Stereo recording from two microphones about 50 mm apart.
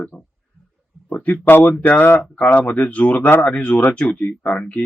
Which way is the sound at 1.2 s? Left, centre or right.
Left.